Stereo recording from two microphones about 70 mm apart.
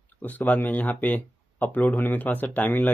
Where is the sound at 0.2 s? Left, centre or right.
Left.